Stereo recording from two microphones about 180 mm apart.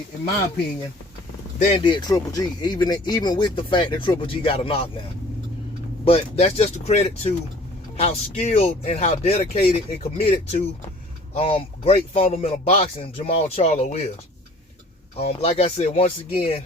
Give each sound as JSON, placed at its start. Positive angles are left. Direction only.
{"t": 1.7, "sound": "speech", "side_deg": 25}
{"t": 6.1, "sound": "speech", "side_deg": 35}
{"t": 15.2, "sound": "speech", "side_deg": 35}